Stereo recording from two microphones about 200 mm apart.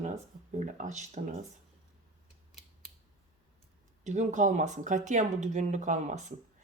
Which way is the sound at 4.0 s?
35° right (ahead or behind).